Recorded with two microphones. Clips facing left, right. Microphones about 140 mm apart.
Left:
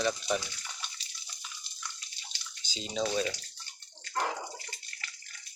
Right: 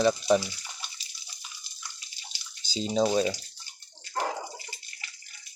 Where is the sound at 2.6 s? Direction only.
35° right (ahead or behind).